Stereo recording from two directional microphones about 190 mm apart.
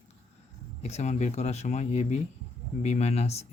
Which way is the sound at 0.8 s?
35° left (ahead or behind).